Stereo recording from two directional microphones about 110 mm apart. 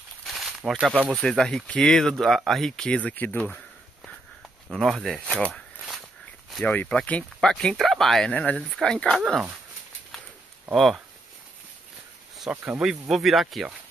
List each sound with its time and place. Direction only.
0.3 s a sound: centre (ahead or behind)
0.9 s speech: 15° right (ahead or behind)
1.2 s speech: 5° left (ahead or behind)
4.6 s speech: 5° right (ahead or behind)
6.6 s speech: 15° left (ahead or behind)
8.5 s speech: centre (ahead or behind)
10.7 s speech: centre (ahead or behind)
12.4 s speech: 10° right (ahead or behind)